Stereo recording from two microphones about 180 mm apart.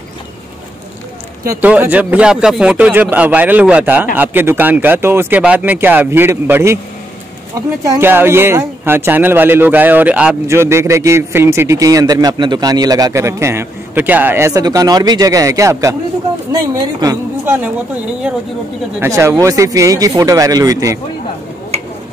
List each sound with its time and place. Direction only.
1.5 s speech: 10° right (ahead or behind)
17.0 s speech: 20° right (ahead or behind)
18.9 s speech: 15° right (ahead or behind)